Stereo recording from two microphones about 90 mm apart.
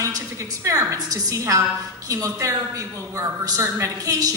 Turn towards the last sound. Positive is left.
turn(degrees=-40)  # may be behind; listen again after turning